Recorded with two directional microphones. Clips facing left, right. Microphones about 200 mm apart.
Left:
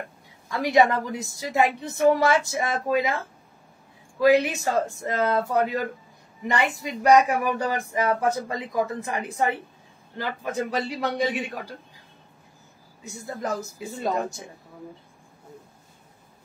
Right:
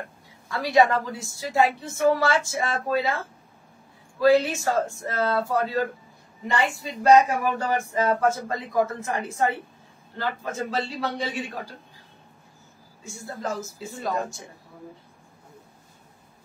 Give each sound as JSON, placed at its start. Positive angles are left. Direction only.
{"t": 0.5, "sound": "a woman's voice", "side_deg": 20}
{"t": 13.0, "sound": "a woman's voice", "side_deg": 20}